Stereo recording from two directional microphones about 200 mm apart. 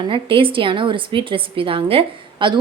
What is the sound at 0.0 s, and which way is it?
A woman's voice, 25° right (ahead or behind).